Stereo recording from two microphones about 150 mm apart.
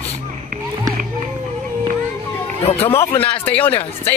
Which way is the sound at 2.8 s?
15° left (ahead or behind).